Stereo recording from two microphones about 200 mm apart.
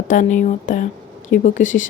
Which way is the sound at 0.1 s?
40° left (ahead or behind).